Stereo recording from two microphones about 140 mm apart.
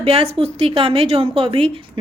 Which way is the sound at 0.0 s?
45° right (ahead or behind).